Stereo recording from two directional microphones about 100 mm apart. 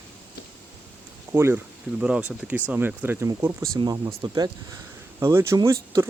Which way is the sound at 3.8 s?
45° right (ahead or behind).